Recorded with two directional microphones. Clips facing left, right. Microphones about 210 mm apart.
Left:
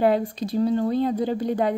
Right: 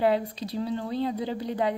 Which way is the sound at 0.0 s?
50° left (ahead or behind).